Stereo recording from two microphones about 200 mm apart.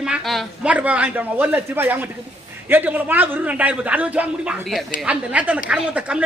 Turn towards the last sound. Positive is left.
turn(degrees=-5)  # may be behind; listen again after turning